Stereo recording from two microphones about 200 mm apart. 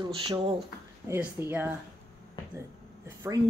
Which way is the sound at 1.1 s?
10° right (ahead or behind).